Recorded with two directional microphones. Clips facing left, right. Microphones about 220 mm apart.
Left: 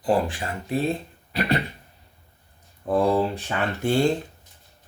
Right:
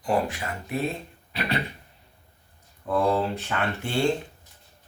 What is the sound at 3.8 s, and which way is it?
Speech, 40° left (ahead or behind).